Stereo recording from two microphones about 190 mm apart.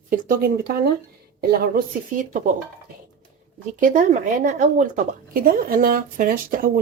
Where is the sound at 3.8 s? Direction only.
40° right (ahead or behind).